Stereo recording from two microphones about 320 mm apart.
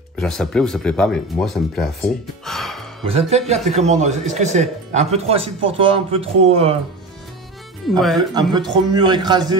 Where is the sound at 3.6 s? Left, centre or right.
Right.